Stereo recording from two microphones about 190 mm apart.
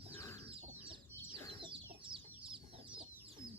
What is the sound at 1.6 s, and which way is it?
Chicken, 25° right (ahead or behind).